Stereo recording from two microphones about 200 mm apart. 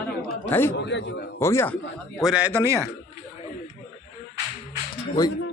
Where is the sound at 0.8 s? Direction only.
65° left (ahead or behind).